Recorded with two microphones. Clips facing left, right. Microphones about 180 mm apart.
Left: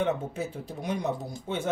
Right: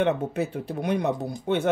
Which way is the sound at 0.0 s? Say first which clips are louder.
Right 5 dB; 65° right (ahead or behind).